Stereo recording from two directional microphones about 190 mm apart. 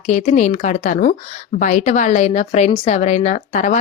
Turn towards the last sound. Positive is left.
turn(degrees=40)  # may be behind; listen again after turning